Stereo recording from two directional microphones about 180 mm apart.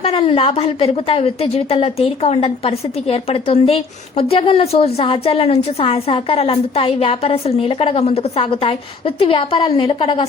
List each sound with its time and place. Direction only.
0.0 s a woman's voice: 30° left (ahead or behind)